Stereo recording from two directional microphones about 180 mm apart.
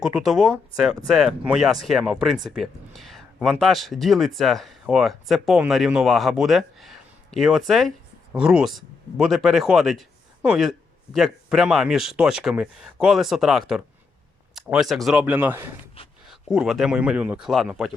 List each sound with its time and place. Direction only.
0.0 s a man's voice: 5° right (ahead or behind)
16.0 s a sound: 30° left (ahead or behind)
16.3 s speech: centre (ahead or behind)